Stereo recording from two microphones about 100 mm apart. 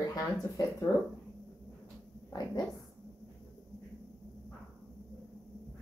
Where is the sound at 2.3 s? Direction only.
40° left (ahead or behind).